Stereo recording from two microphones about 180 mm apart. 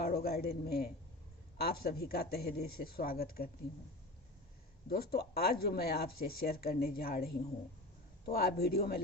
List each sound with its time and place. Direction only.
0.0 s speech: 60° left (ahead or behind)
4.9 s speech: 60° left (ahead or behind)